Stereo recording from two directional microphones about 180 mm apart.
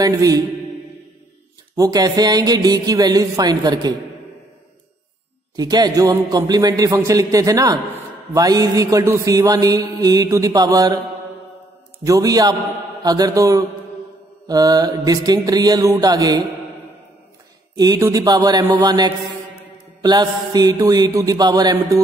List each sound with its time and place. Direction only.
0.0 s mantra: 20° right (ahead or behind)
1.8 s mantra: 20° right (ahead or behind)
5.6 s mantra: 20° right (ahead or behind)
12.0 s mantra: 20° right (ahead or behind)
17.7 s mantra: 20° right (ahead or behind)